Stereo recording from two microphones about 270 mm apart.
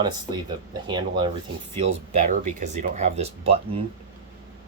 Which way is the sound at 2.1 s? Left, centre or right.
Right.